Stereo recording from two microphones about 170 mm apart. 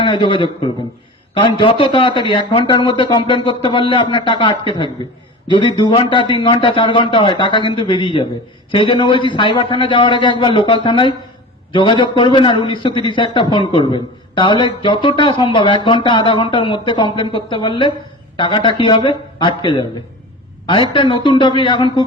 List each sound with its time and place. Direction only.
0.0 s a man's voice: 30° left (ahead or behind)